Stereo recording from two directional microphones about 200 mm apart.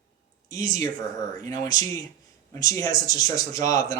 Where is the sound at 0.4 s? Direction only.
20° left (ahead or behind).